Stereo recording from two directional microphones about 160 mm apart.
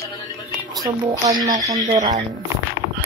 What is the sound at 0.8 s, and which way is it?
Speech, 25° right (ahead or behind).